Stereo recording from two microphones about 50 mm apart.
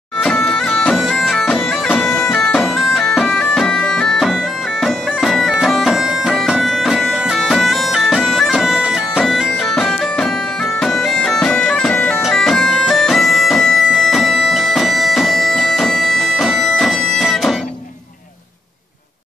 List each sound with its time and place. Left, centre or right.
0.2 s bagpipes: centre
0.9 s bagpipes: centre
2.6 s bagpipes: centre
8.5 s bagpipes: centre
9.7 s bagpipes: centre